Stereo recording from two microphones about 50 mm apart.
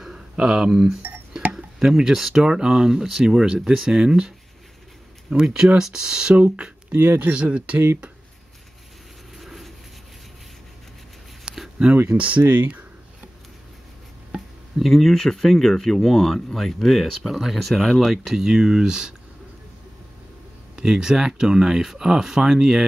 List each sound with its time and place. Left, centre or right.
0.0 s a sound: centre
1.8 s speech: centre
5.3 s speech: centre
6.3 s speech: right
9.4 s a sound: centre
11.5 s a sound: centre
12.2 s speech: right
14.8 s speech: centre
20.7 s speech: centre